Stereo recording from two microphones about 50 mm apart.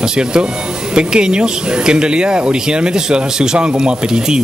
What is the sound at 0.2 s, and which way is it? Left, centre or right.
Speech, centre.